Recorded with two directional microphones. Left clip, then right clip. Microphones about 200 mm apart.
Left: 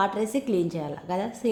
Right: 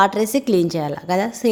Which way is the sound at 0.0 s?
45° right (ahead or behind).